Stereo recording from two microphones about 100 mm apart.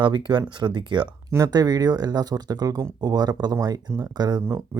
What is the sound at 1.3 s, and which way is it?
Speech, 40° right (ahead or behind).